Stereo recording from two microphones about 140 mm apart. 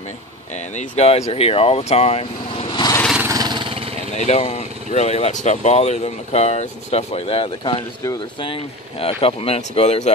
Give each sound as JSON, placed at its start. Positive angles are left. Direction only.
{"t": 0.7, "sound": "speech", "side_deg": 50}
{"t": 3.3, "sound": "vehicle", "side_deg": -30}
{"t": 4.1, "sound": "speech", "side_deg": 55}
{"t": 9.0, "sound": "speech", "side_deg": 45}